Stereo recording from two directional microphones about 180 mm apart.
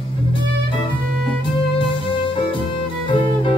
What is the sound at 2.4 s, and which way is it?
Music, 25° left (ahead or behind).